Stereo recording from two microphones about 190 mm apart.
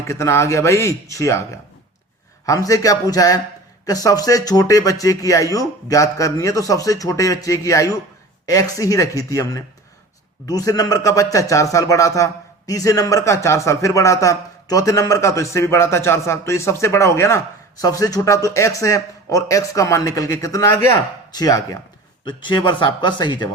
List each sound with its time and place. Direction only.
0.1 s a man's voice: 15° left (ahead or behind)